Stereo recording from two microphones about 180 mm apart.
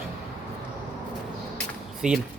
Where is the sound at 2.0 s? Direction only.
5° right (ahead or behind).